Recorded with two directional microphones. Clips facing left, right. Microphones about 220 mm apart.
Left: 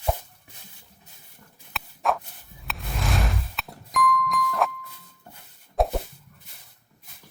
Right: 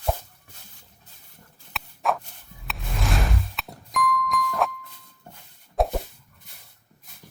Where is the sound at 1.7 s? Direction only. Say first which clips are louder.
Even; centre (ahead or behind).